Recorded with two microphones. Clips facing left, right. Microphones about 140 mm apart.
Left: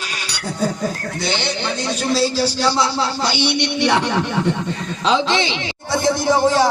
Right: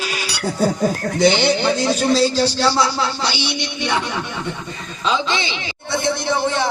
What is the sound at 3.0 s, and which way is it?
Speech, 50° left (ahead or behind).